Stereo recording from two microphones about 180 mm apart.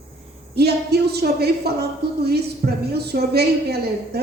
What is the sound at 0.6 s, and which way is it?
A woman's voice, 60° right (ahead or behind).